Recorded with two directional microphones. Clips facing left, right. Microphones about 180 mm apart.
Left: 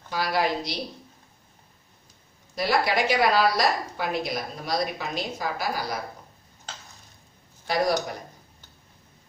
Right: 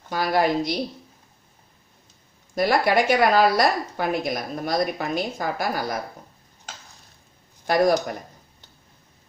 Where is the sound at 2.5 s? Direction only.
50° right (ahead or behind).